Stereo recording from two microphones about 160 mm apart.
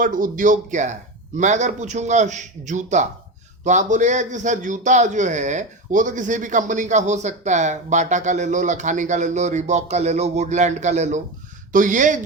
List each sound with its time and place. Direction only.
0.0 s a man's voice: 55° right (ahead or behind)